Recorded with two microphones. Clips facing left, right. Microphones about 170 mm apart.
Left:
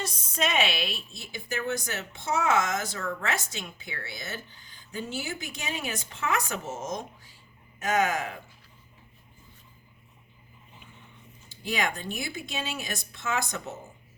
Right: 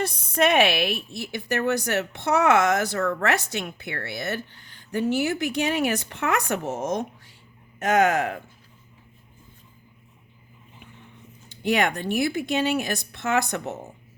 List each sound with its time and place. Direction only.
0.0 s a woman's voice: 60° right (ahead or behind)
11.4 s speech: 65° right (ahead or behind)